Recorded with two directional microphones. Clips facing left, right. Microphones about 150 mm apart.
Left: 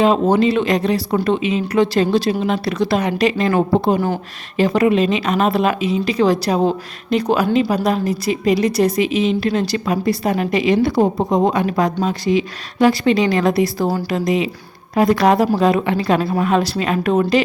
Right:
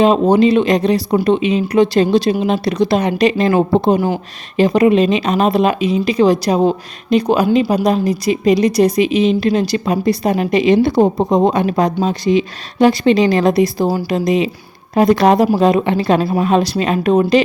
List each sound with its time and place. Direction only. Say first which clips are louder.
0.0 s a woman's voice: right 3 dB; 20° right (ahead or behind)